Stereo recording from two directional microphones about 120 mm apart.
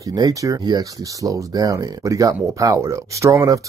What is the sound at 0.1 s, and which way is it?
Speech, 30° right (ahead or behind).